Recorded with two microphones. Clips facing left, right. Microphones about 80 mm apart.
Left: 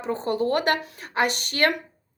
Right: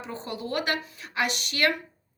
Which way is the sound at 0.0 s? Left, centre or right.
Left.